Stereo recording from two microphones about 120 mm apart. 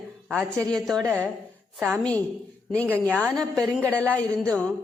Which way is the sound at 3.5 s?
25° right (ahead or behind).